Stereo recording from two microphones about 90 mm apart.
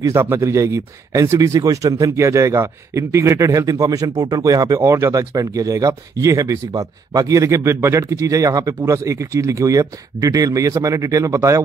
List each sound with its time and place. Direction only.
0.0 s speech: 30° right (ahead or behind)
4.7 s speech: 30° right (ahead or behind)